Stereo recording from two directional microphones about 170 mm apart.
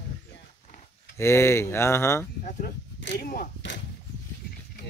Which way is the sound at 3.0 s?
75° left (ahead or behind).